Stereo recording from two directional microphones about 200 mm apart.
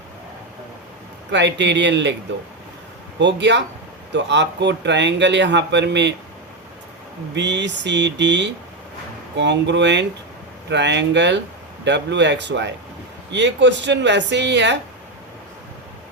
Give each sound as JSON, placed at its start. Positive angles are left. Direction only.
{"t": 1.3, "sound": "a man's voice", "side_deg": -65}
{"t": 3.2, "sound": "a man's voice", "side_deg": -60}
{"t": 7.3, "sound": "a man's voice", "side_deg": -60}